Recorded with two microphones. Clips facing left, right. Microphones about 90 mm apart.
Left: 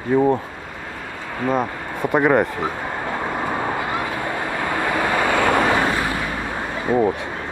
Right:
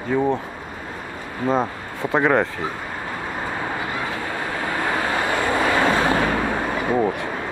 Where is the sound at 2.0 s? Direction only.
10° left (ahead or behind).